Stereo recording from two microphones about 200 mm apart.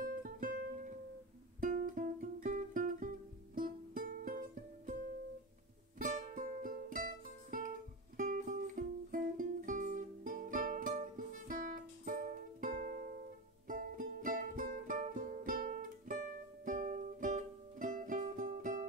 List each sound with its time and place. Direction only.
0.0 s music: 45° right (ahead or behind)
5.9 s music: 40° right (ahead or behind)